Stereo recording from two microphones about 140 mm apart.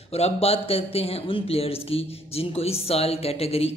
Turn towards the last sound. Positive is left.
turn(degrees=45)  # may be behind; listen again after turning